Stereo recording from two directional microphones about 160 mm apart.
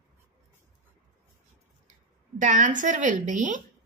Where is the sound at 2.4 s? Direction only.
50° right (ahead or behind).